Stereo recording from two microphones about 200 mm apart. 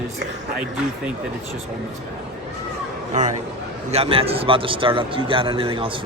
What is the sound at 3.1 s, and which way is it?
A man's voice, 35° right (ahead or behind).